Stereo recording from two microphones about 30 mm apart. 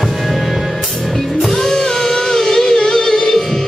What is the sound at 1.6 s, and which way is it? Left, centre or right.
Music, centre.